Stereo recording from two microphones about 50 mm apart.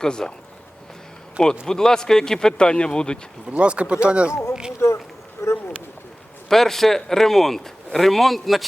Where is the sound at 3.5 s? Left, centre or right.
Right.